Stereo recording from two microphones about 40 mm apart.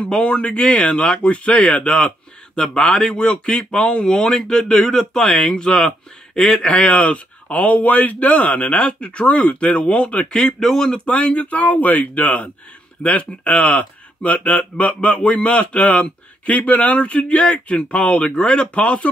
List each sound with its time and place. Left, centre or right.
0.3 s speech: left
6.3 s speech: centre
6.7 s a man's voice: left
10.6 s speech: centre
11.1 s a man's voice: left